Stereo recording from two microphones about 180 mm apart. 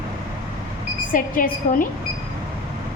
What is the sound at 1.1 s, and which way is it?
Speech, 50° left (ahead or behind).